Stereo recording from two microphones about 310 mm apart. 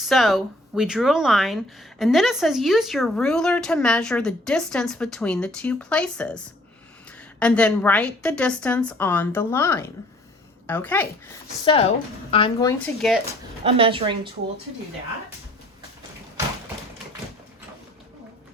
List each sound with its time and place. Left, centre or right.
0.0 s speech: centre
11.6 s speech: centre
13.7 s a woman's voice: centre